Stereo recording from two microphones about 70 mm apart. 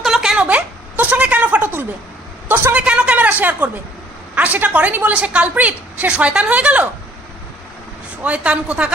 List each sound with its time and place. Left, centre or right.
0.0 s a sound: centre
2.7 s a woman's voice: centre
8.2 s a woman's voice: centre